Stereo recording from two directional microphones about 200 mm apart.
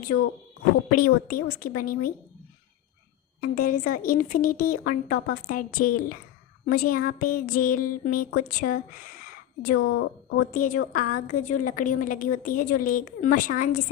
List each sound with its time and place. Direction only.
0.9 s a woman's voice: 45° left (ahead or behind)
3.4 s a woman's voice: 45° left (ahead or behind)
10.0 s a woman's voice: 70° left (ahead or behind)
10.5 s a woman's voice: 40° left (ahead or behind)